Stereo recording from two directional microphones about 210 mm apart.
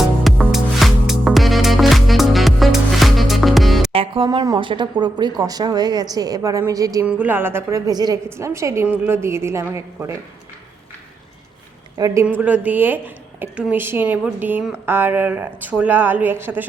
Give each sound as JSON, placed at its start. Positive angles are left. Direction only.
{"t": 0.3, "sound": "music", "side_deg": 0}
{"t": 3.9, "sound": "speech", "side_deg": -25}
{"t": 11.9, "sound": "speech", "side_deg": -15}